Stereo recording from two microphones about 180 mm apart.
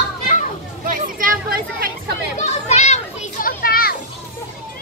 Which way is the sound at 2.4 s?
40° left (ahead or behind).